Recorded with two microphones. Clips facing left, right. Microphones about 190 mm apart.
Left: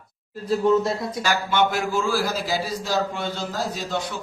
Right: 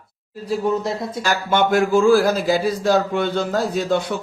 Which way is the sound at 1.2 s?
50° right (ahead or behind).